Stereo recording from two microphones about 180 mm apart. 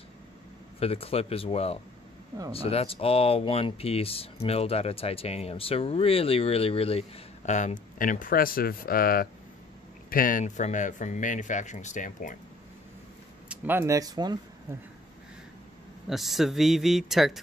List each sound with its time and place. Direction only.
0.7 s speech: 35° left (ahead or behind)
13.5 s speech: 10° right (ahead or behind)
16.1 s speech: centre (ahead or behind)